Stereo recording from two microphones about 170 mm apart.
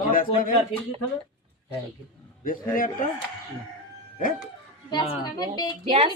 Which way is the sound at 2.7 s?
55° left (ahead or behind).